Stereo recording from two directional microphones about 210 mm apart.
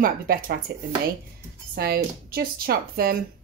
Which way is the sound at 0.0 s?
40° right (ahead or behind).